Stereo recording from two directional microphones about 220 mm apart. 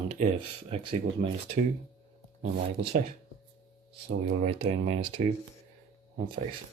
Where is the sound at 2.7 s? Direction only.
45° right (ahead or behind).